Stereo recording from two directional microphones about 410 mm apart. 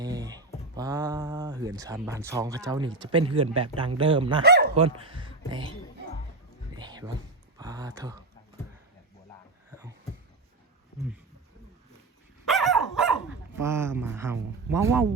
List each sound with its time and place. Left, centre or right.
0.0 s speech: centre
6.7 s music: centre
7.6 s speech: centre
12.5 s dog: centre
13.6 s speech: centre